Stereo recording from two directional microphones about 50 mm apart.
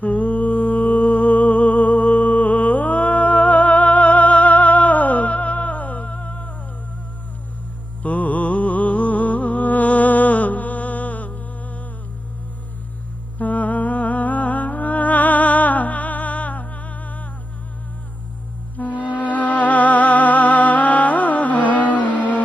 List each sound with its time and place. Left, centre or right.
0.0 s music: left
8.0 s music: left
13.4 s music: left
18.8 s music: left